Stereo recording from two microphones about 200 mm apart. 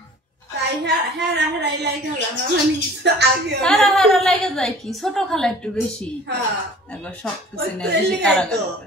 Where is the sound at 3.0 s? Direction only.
60° right (ahead or behind).